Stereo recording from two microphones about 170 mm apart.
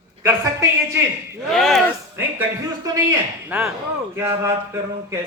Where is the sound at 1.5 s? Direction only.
Centre (ahead or behind).